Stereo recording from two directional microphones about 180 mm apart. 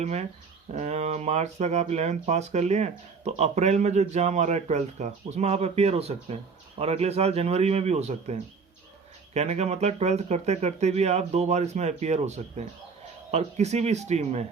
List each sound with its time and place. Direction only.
0.0 s speech: 35° right (ahead or behind)